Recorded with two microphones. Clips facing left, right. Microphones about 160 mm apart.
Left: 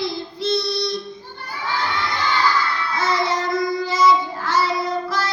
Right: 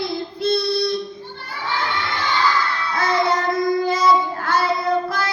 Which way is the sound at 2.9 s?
55° right (ahead or behind).